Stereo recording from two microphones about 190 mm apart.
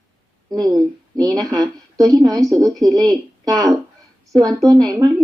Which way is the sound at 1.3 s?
20° right (ahead or behind).